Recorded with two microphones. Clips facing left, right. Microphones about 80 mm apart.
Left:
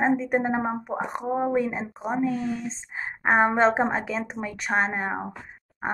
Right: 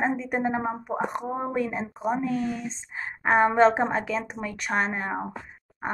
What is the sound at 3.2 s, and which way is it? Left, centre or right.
Speech, left.